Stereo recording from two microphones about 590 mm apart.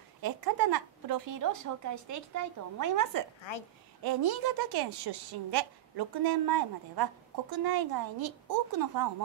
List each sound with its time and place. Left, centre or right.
0.2 s speech: right